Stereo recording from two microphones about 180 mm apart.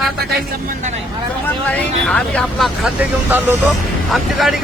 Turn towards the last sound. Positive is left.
turn(degrees=0)  # may be behind; listen again after turning